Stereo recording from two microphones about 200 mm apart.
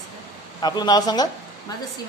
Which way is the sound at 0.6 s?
20° left (ahead or behind).